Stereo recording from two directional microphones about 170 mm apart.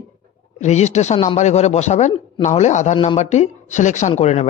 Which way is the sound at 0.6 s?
45° left (ahead or behind).